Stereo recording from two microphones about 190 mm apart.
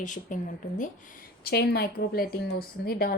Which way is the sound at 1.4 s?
55° left (ahead or behind).